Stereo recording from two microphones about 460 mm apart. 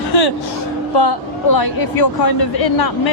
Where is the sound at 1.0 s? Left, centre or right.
Left.